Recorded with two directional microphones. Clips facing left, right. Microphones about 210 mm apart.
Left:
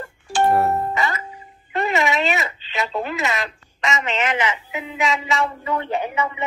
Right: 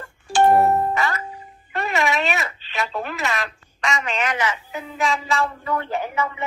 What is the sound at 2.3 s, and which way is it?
Telephone, 20° left (ahead or behind).